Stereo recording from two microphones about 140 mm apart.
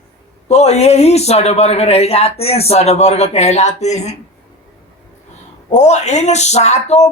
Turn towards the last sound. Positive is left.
turn(degrees=55)  # may be behind; listen again after turning